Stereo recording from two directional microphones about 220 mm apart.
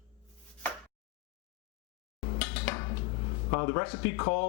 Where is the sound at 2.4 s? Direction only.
10° left (ahead or behind).